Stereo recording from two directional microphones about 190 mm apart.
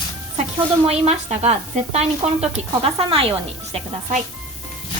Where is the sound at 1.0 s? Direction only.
35° right (ahead or behind).